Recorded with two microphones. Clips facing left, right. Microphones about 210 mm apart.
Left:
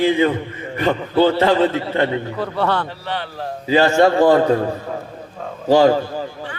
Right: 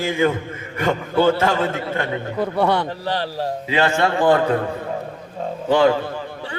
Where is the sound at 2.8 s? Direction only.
40° right (ahead or behind).